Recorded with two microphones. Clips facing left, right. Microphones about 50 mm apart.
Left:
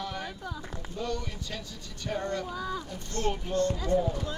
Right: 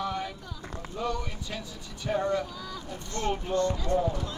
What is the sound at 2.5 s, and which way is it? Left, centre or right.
Speech, left.